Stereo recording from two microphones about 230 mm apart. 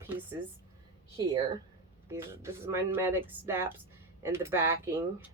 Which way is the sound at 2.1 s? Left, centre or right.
Centre.